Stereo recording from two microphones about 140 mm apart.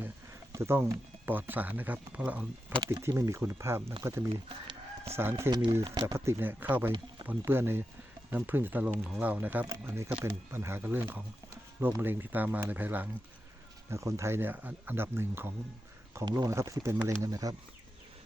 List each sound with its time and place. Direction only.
0.5 s speech: 20° right (ahead or behind)
2.8 s speech: 20° right (ahead or behind)
4.3 s speech: 35° right (ahead or behind)
5.1 s speech: 20° right (ahead or behind)
5.8 s speech: 30° right (ahead or behind)
6.1 s speech: 15° right (ahead or behind)